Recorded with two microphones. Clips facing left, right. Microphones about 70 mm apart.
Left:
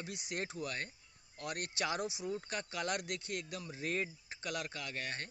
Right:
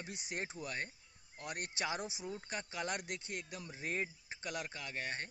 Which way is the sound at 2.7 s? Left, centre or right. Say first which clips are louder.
Left 2 dB; right.